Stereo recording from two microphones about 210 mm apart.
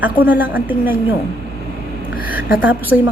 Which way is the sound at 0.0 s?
10° right (ahead or behind).